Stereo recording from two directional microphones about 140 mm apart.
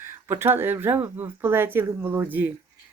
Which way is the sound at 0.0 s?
15° right (ahead or behind).